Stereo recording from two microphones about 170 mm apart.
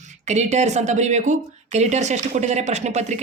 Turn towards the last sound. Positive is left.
turn(degrees=-40)  # may be behind; listen again after turning